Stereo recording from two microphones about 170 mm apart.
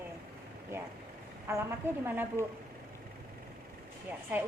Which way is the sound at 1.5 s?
15° right (ahead or behind).